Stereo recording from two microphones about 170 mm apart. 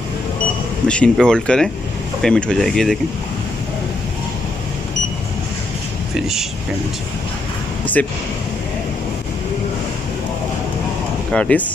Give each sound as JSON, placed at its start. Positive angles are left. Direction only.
{"t": 0.8, "sound": "speech", "side_deg": 5}
{"t": 6.1, "sound": "speech", "side_deg": 0}
{"t": 7.8, "sound": "a sound", "side_deg": 10}
{"t": 11.3, "sound": "speech", "side_deg": 5}